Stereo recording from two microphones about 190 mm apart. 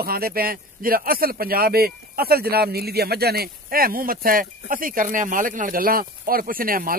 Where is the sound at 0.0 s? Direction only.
50° right (ahead or behind).